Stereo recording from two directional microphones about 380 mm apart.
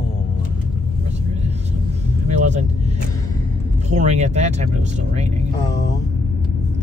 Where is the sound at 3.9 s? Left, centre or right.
Centre.